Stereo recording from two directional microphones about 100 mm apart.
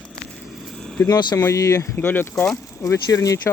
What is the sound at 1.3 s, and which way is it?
Speech, 30° left (ahead or behind).